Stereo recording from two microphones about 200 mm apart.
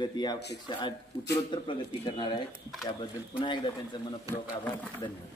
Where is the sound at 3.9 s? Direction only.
25° left (ahead or behind).